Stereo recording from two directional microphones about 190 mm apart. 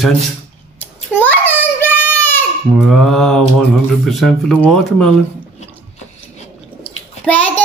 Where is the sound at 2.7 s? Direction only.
Centre (ahead or behind).